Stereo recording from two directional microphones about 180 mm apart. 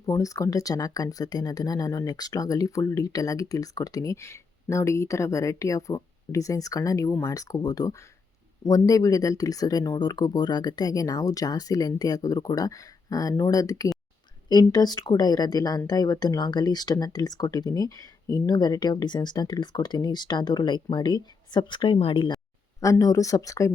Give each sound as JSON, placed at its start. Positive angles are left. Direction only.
{"t": 0.0, "sound": "speech", "side_deg": 20}